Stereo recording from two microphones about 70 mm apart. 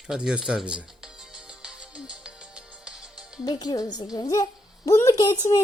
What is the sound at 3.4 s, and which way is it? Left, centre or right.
Speech, left.